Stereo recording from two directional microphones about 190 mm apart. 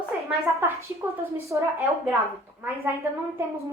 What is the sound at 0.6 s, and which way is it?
A woman's voice, 10° right (ahead or behind).